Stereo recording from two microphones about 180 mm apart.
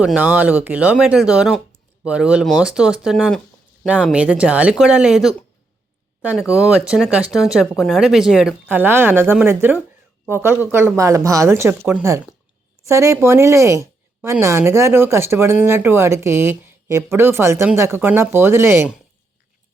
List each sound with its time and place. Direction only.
0.0 s a woman's voice: 10° right (ahead or behind)